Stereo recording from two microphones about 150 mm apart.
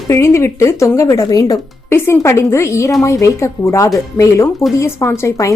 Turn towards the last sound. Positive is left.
turn(degrees=20)  # may be behind; listen again after turning